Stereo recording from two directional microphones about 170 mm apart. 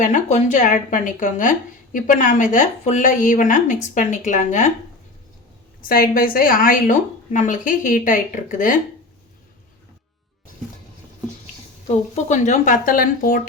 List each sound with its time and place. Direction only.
0.0 s a woman's voice: 45° left (ahead or behind)
5.9 s a woman's voice: 60° left (ahead or behind)
12.1 s a woman's voice: 45° left (ahead or behind)